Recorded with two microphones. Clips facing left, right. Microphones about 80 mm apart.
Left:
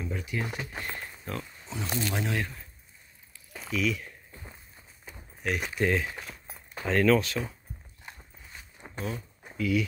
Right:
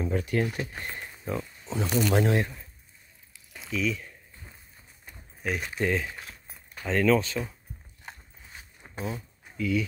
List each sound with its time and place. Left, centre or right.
0.0 s speech: right
0.5 s speech: left
1.3 s speech: centre
1.7 s speech: right
3.7 s speech: centre
5.6 s speech: centre
8.9 s speech: centre